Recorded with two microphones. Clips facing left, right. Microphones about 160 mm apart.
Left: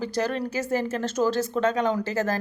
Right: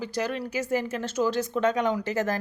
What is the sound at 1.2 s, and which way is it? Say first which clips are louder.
Speech: left 2 dB; 35° left (ahead or behind).